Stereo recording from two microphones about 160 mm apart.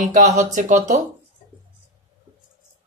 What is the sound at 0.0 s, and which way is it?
Speech, 55° right (ahead or behind).